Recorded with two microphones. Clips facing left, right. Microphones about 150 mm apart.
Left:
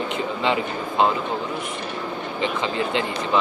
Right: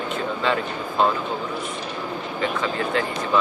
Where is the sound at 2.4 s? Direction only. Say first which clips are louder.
Even; 20° left (ahead or behind).